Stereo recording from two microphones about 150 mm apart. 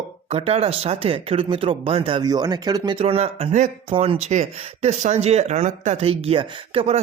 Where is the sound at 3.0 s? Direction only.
45° right (ahead or behind).